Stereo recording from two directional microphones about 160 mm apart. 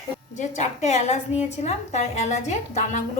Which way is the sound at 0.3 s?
50° left (ahead or behind).